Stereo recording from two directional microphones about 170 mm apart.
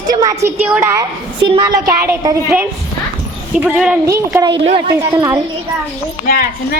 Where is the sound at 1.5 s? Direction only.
25° right (ahead or behind).